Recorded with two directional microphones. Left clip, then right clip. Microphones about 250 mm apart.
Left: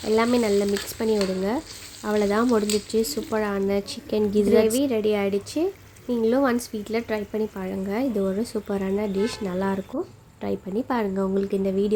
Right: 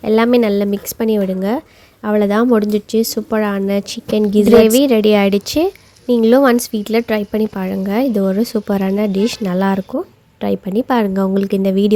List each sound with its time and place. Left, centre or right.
0.0 s speech: right